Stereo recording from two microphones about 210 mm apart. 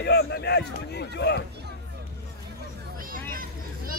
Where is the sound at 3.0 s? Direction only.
40° right (ahead or behind).